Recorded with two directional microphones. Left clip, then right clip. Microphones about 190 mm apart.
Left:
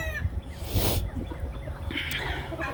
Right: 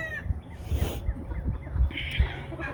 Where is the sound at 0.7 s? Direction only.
25° left (ahead or behind).